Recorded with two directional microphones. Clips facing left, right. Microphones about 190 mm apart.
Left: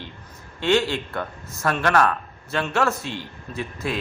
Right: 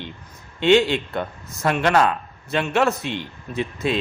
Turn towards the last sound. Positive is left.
turn(degrees=-20)  # may be behind; listen again after turning